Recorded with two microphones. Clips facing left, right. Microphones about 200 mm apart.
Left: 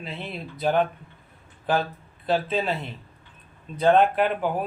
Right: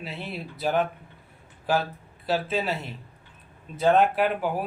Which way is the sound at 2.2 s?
5° right (ahead or behind).